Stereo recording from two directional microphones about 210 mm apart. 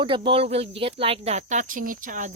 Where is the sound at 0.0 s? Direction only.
25° right (ahead or behind).